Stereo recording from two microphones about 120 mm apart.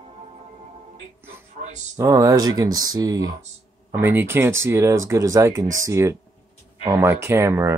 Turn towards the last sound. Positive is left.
turn(degrees=-25)  # may be behind; listen again after turning